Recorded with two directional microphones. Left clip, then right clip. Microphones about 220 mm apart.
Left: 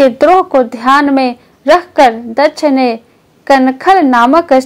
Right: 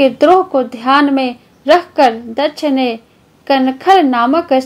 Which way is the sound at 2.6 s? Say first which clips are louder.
Left 5 dB; 30° left (ahead or behind).